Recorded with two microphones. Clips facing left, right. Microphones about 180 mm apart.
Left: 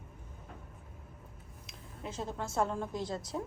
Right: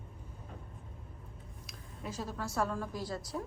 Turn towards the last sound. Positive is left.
turn(degrees=20)  # may be behind; listen again after turning